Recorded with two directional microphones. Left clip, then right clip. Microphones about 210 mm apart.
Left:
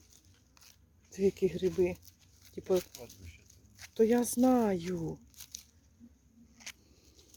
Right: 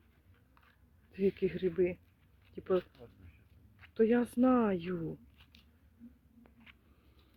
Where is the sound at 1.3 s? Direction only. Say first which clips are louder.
Left 2 dB; 5° left (ahead or behind).